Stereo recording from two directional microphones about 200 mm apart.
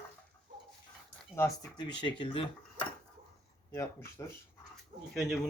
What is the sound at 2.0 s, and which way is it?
Speech, 25° left (ahead or behind).